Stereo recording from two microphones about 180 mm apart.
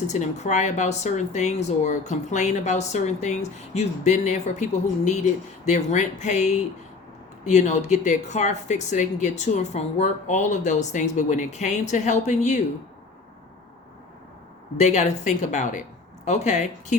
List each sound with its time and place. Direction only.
0.1 s speech: 40° left (ahead or behind)
14.8 s speech: 40° left (ahead or behind)